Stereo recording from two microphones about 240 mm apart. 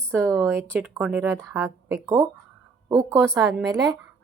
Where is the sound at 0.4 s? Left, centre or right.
Centre.